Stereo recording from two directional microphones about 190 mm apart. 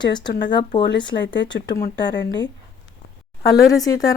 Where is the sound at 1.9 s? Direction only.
65° left (ahead or behind).